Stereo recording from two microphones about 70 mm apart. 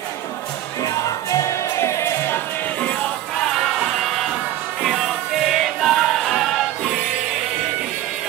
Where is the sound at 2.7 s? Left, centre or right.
Centre.